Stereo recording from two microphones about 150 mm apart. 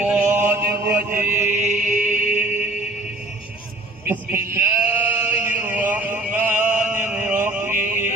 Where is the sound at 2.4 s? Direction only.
15° right (ahead or behind).